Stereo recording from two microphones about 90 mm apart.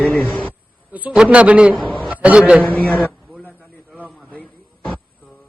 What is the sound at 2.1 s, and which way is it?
Speech, 15° right (ahead or behind).